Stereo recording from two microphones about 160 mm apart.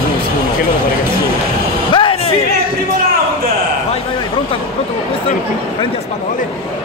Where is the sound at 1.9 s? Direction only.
30° left (ahead or behind).